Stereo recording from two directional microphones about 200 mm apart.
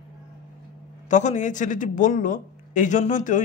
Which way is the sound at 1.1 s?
35° left (ahead or behind).